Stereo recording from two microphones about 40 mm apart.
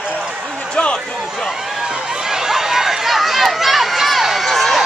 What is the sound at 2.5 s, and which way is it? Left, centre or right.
Run, centre.